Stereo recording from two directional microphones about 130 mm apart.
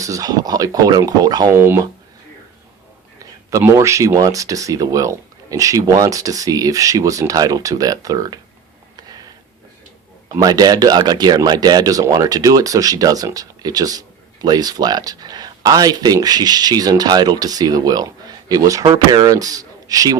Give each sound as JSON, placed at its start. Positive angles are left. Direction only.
{"t": 0.0, "sound": "speech", "side_deg": -25}
{"t": 3.6, "sound": "speech", "side_deg": -20}
{"t": 9.0, "sound": "a sound", "side_deg": -30}
{"t": 10.3, "sound": "speech", "side_deg": -30}